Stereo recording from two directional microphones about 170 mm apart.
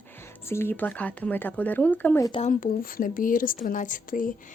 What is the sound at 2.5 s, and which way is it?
Speech, 55° left (ahead or behind).